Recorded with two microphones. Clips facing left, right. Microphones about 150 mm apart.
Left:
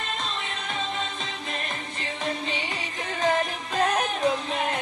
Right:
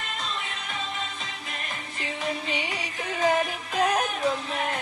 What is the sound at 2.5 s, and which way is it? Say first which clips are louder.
Music: right 1 dB; 15° right (ahead or behind).